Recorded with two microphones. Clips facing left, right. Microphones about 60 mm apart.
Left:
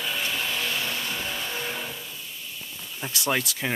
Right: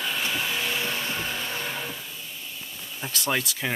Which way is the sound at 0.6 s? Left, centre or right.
Centre.